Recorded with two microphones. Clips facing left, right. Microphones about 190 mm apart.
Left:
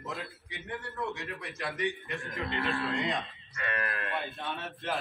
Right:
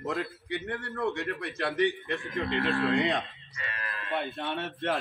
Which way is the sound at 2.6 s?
55° right (ahead or behind).